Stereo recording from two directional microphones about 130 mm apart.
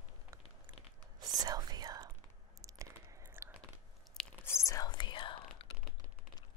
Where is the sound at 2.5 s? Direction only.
30° right (ahead or behind).